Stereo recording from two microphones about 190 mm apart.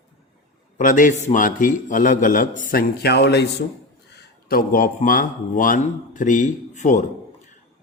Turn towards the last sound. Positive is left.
turn(degrees=40)  # may be behind; listen again after turning